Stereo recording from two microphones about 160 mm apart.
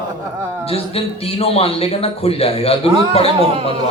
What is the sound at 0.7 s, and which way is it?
Speech, 35° left (ahead or behind).